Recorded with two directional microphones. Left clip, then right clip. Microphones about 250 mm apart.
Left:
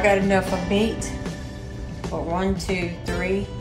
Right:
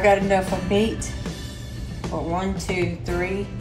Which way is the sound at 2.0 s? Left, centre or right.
Centre.